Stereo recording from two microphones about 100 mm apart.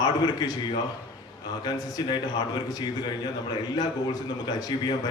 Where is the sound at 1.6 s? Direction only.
40° left (ahead or behind).